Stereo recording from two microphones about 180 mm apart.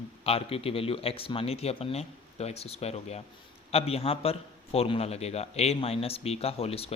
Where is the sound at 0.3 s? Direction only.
35° left (ahead or behind).